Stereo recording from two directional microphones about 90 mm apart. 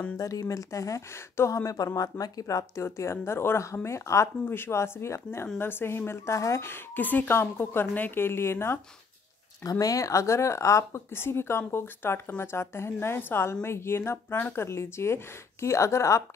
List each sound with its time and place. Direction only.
0.2 s speech: 40° left (ahead or behind)
9.6 s speech: 40° left (ahead or behind)